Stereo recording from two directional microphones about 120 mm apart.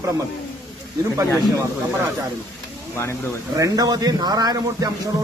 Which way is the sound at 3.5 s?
30° right (ahead or behind).